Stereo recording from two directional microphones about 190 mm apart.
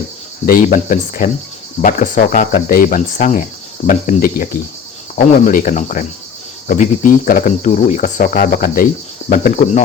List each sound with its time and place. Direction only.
0.4 s speech: 50° left (ahead or behind)
9.3 s cricket: 40° left (ahead or behind)